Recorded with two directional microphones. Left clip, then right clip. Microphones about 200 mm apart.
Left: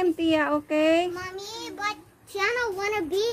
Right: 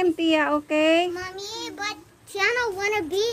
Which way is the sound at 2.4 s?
25° left (ahead or behind).